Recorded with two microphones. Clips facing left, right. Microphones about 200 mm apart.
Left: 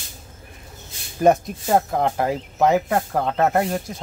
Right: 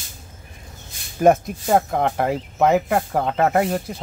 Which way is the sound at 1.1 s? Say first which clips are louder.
Right 1 dB; 5° right (ahead or behind).